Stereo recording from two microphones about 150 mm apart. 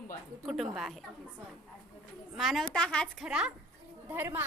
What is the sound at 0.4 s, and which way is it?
Speech, centre (ahead or behind).